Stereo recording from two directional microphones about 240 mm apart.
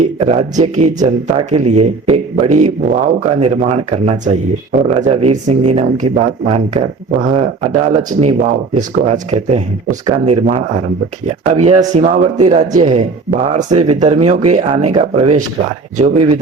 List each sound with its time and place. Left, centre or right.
0.0 s speech: right